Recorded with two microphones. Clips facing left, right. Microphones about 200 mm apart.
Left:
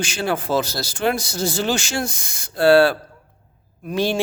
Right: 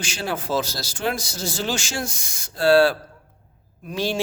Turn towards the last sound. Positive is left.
turn(degrees=55)  # may be behind; listen again after turning